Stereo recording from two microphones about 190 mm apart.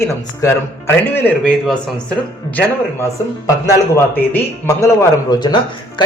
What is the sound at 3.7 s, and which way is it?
A man's voice, 15° left (ahead or behind).